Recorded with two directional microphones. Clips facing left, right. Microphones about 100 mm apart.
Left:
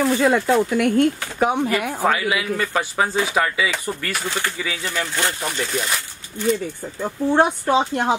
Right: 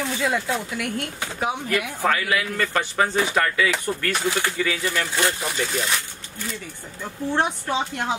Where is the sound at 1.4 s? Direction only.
55° left (ahead or behind).